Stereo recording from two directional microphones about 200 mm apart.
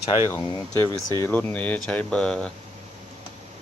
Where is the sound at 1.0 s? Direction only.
15° left (ahead or behind).